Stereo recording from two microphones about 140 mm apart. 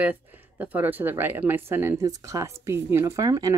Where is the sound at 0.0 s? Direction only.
10° right (ahead or behind).